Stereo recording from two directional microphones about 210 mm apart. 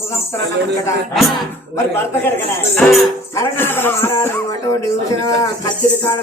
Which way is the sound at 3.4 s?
10° left (ahead or behind).